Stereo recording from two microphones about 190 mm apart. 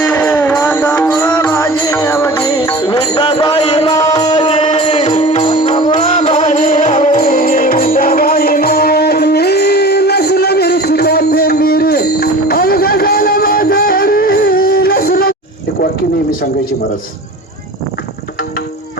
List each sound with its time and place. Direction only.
0.0 s music: 10° left (ahead or behind); by 15.4 s 55° left (ahead or behind)